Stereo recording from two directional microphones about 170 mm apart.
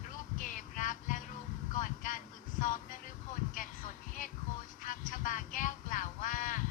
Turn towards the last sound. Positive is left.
turn(degrees=50)  # may be behind; listen again after turning